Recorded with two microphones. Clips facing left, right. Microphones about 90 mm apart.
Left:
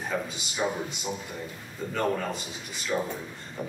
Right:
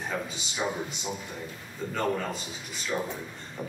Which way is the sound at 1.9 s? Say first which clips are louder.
Left 1 dB; centre (ahead or behind).